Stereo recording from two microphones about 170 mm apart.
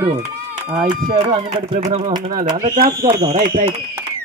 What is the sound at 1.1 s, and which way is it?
Speech, 30° right (ahead or behind).